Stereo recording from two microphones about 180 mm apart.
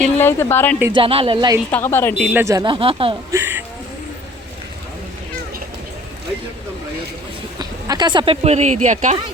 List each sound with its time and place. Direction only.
0.0 s speech: 10° left (ahead or behind)
0.9 s speech: 30° right (ahead or behind)
1.7 s speech: 15° left (ahead or behind)
2.1 s speech: centre (ahead or behind)
2.4 s speech: 20° right (ahead or behind)
3.3 s speech: 10° right (ahead or behind)
7.6 s speech: 25° right (ahead or behind); by 9.1 s 45° right (ahead or behind)